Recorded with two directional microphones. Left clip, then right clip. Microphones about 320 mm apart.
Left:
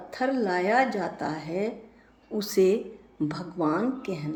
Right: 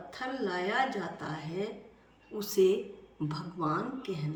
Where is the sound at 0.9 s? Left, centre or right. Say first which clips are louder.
Left 7 dB; centre.